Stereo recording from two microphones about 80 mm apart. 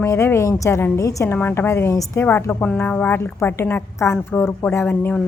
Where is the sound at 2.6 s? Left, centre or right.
Centre.